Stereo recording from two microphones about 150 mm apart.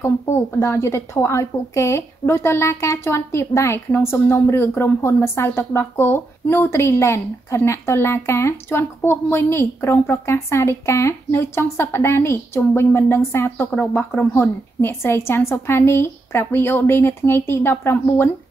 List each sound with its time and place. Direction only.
0.0 s a woman's voice: 20° left (ahead or behind)